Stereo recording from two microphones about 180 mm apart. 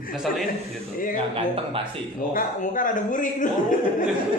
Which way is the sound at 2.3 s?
50° left (ahead or behind).